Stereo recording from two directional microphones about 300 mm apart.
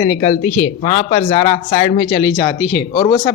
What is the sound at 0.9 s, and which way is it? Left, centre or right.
Speech, left.